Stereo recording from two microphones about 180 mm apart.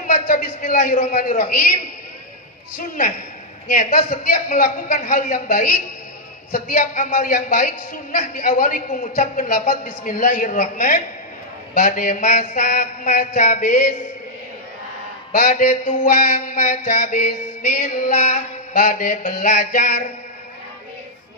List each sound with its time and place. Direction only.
0.0 s mantra: 50° left (ahead or behind)
3.6 s mantra: 50° left (ahead or behind)
15.3 s mantra: 50° left (ahead or behind)